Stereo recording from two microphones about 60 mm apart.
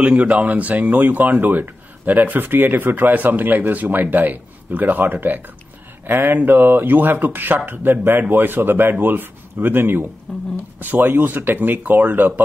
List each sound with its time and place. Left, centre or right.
0.0 s speech: right
10.3 s speech: centre
10.8 s speech: right